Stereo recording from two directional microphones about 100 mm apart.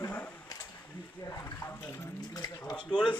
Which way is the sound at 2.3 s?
40° left (ahead or behind).